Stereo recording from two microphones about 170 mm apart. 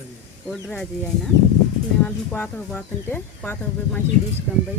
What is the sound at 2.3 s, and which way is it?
Speech, 10° left (ahead or behind).